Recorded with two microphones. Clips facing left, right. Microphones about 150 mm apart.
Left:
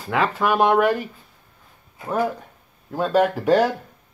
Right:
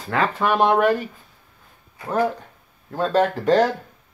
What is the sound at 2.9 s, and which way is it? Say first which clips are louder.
Speech: left 1 dB; 10° left (ahead or behind).